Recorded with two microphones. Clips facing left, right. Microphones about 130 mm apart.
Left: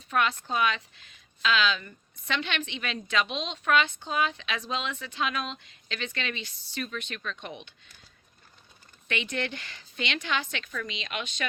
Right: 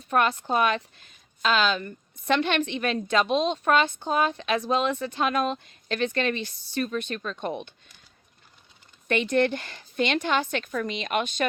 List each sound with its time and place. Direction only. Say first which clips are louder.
0.1 s speech: right 4 dB; 45° right (ahead or behind)
9.0 s speech: right 9 dB; 45° right (ahead or behind)